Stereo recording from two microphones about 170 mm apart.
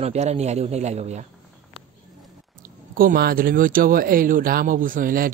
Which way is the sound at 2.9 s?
60° right (ahead or behind).